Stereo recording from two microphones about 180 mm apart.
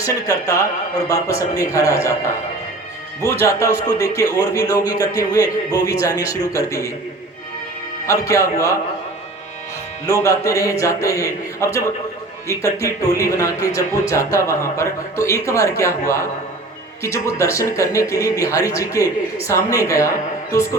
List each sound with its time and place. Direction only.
0.0 s a man's voice: 20° left (ahead or behind)
3.2 s speech: 15° left (ahead or behind)
8.0 s speech: 15° left (ahead or behind)
10.1 s speech: 15° left (ahead or behind)